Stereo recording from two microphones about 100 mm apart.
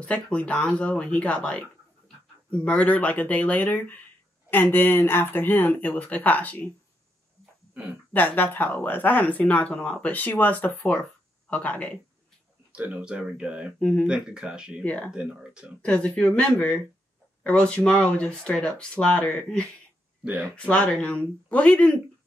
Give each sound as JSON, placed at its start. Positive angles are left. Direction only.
{"t": 0.0, "sound": "speech", "side_deg": 10}
{"t": 8.1, "sound": "speech", "side_deg": 20}
{"t": 12.7, "sound": "speech", "side_deg": -10}
{"t": 13.7, "sound": "speech", "side_deg": 15}
{"t": 14.0, "sound": "speech", "side_deg": -10}
{"t": 14.8, "sound": "speech", "side_deg": 15}
{"t": 15.0, "sound": "speech", "side_deg": -10}
{"t": 15.8, "sound": "speech", "side_deg": 15}